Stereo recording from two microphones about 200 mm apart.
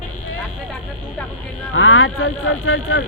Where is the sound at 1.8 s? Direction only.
90° left.